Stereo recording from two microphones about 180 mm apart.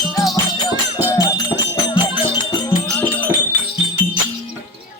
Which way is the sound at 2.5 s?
15° left (ahead or behind).